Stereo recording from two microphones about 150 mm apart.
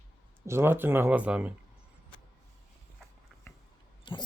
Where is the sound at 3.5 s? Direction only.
15° left (ahead or behind).